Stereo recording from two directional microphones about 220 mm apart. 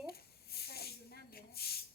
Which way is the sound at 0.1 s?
45° left (ahead or behind).